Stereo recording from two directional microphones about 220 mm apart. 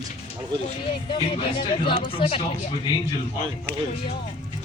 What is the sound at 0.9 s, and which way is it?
Speech, 25° left (ahead or behind).